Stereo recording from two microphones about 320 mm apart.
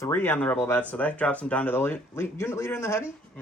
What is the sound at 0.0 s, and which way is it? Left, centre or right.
Speech, centre.